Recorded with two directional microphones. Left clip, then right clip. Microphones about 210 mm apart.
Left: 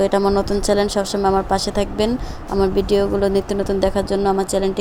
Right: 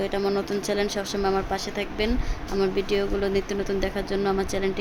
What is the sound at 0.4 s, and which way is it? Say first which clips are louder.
A woman's voice: left 8 dB; 20° left (ahead or behind).